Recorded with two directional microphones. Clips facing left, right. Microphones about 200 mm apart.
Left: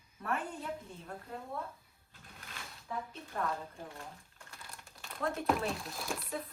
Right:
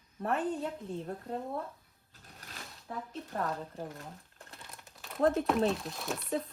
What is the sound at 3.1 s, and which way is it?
Speech, 40° right (ahead or behind).